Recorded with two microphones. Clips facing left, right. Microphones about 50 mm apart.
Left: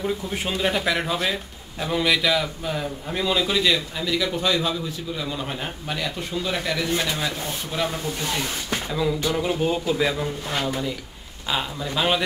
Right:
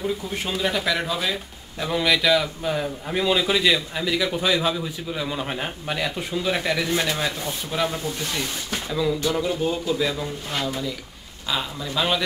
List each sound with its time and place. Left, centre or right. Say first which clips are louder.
0.0 s a man's voice: left 1 dB; centre
8.7 s a man's voice: right 1 dB; centre
11.4 s speech: left 1 dB; centre